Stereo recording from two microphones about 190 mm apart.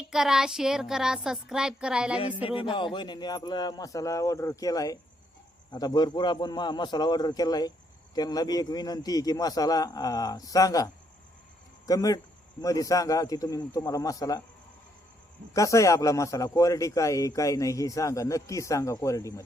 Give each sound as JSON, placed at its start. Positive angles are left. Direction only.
{"t": 0.1, "sound": "a sound", "side_deg": -5}
{"t": 2.2, "sound": "a man's voice", "side_deg": 25}
{"t": 11.9, "sound": "a man's voice", "side_deg": 20}
{"t": 15.5, "sound": "a man's voice", "side_deg": 15}